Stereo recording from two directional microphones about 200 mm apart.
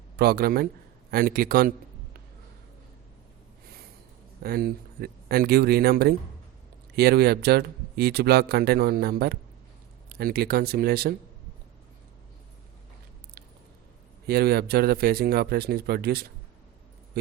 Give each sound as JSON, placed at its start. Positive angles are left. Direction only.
{"t": 0.2, "sound": "speech", "side_deg": -50}
{"t": 4.4, "sound": "speech", "side_deg": -50}
{"t": 14.3, "sound": "speech", "side_deg": -55}